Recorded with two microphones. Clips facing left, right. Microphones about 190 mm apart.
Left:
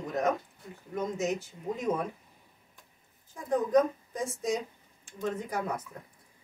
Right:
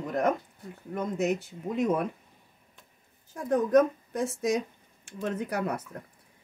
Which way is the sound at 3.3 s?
70° right (ahead or behind).